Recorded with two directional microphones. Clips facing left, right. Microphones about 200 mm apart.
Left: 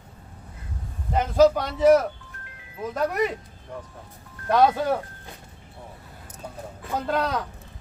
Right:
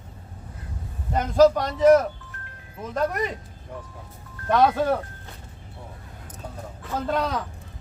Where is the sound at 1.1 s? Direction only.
5° left (ahead or behind).